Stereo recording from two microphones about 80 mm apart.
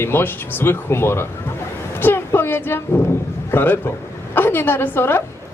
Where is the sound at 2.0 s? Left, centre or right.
Left.